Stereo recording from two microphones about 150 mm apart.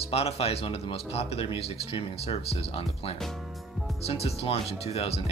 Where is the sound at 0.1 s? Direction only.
40° left (ahead or behind).